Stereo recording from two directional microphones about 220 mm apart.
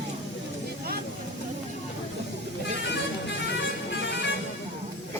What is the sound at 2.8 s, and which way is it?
Vehicle, 50° left (ahead or behind).